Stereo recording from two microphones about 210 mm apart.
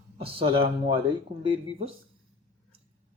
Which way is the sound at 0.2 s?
25° right (ahead or behind).